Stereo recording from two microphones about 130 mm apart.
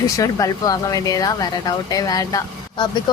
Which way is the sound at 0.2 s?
25° left (ahead or behind).